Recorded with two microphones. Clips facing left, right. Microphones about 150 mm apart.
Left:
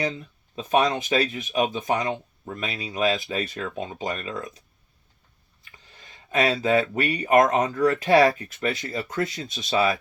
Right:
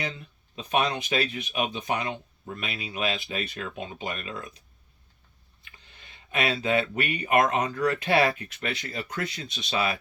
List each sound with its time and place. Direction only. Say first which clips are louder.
0.5 s speech: left 5 dB; 35° left (ahead or behind)
5.6 s speech: left 3 dB; 35° left (ahead or behind)